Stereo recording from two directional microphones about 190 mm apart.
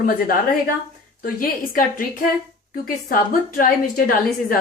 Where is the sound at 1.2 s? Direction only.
50° left (ahead or behind).